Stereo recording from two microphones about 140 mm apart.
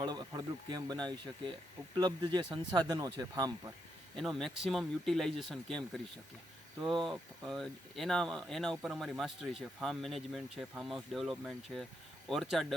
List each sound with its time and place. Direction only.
0.0 s speech: 30° right (ahead or behind)
4.1 s speech: centre (ahead or behind)